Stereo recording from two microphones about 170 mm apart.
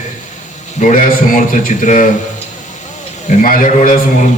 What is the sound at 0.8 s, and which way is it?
A man's voice, 50° left (ahead or behind).